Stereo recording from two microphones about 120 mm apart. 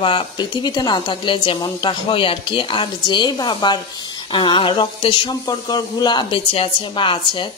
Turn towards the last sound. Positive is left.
turn(degrees=45)  # may be behind; listen again after turning